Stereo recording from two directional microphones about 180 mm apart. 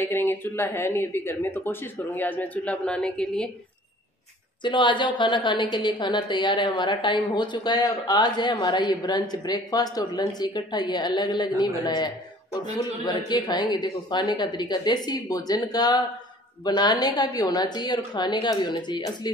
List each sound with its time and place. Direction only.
0.0 s speech: 10° left (ahead or behind)
4.6 s a woman's voice: 25° left (ahead or behind)